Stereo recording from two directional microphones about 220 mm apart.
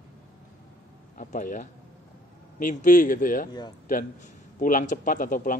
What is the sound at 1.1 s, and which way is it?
A man's voice, 35° left (ahead or behind).